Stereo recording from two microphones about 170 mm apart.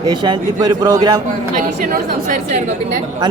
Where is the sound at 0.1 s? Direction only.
25° right (ahead or behind).